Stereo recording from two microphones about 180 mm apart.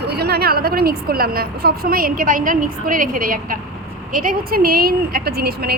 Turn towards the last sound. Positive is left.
turn(degrees=-60)  # may be behind; listen again after turning